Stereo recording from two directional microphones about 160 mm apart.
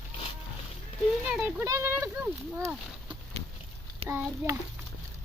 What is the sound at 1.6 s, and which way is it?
Speech, 15° right (ahead or behind).